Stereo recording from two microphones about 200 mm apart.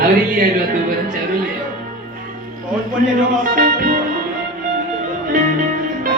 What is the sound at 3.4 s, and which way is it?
Music, 45° right (ahead or behind).